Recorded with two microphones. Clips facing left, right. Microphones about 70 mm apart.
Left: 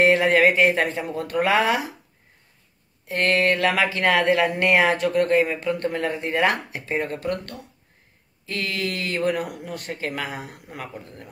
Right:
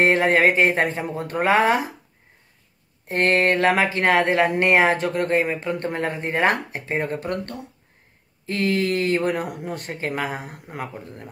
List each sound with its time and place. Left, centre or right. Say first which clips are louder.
0.0 s speech: even; right
3.1 s speech: right 2 dB; right
5.9 s speech: even; right
9.7 s speech: right 2 dB; right
10.2 s speech: right 3 dB; right